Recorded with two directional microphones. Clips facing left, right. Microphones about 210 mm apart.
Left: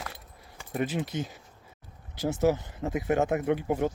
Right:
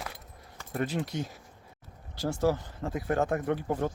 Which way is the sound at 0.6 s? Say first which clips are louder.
Left 2 dB; 15° left (ahead or behind).